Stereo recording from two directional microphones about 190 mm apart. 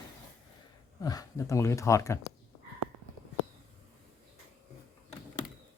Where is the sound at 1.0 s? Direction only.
20° left (ahead or behind).